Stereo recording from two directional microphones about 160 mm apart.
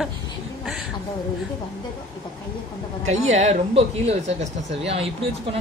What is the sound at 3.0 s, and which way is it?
Speech, 45° right (ahead or behind).